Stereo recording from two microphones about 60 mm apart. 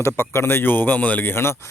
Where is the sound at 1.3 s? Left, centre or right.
Left.